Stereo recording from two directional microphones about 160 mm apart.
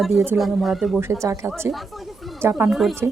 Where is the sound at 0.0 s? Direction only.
Centre (ahead or behind).